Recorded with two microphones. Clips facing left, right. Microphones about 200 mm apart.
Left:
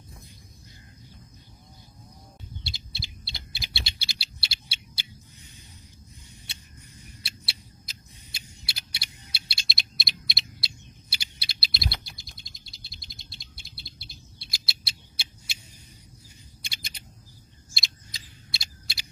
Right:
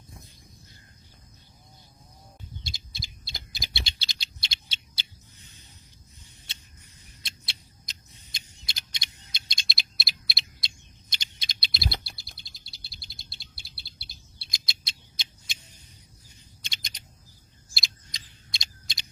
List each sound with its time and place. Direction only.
2.6 s owl: 45° right (ahead or behind)
3.8 s a sound: 10° left (ahead or behind)
7.0 s rodents: 10° left (ahead or behind)
11.1 s bird: 10° left (ahead or behind)
11.8 s bird: 35° right (ahead or behind)
14.4 s rodents: 5° left (ahead or behind)
16.6 s typing: 10° left (ahead or behind)
17.7 s a sound: 5° left (ahead or behind)